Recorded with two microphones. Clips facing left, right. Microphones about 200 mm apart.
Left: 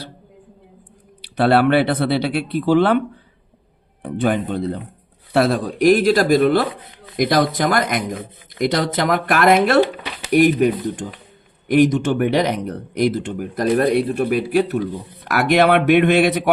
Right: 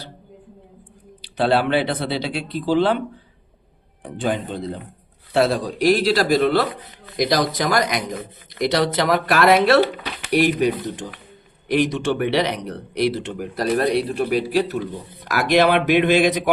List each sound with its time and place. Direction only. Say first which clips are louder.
1.2 s speech: left 4 dB; 60° left (ahead or behind)
4.0 s speech: left 4 dB; 55° left (ahead or behind)